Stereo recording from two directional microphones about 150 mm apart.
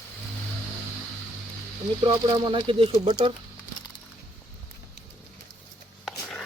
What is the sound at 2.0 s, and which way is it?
Speech, 35° right (ahead or behind).